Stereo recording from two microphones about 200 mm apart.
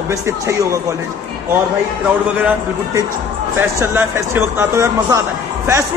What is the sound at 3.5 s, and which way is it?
A man's voice, 10° right (ahead or behind).